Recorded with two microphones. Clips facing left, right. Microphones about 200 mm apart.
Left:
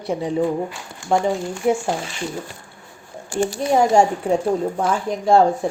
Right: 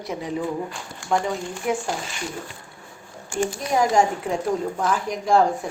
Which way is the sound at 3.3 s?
35° left (ahead or behind).